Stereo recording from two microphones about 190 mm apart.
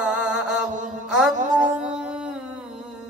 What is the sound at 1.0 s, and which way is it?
Music, 5° right (ahead or behind).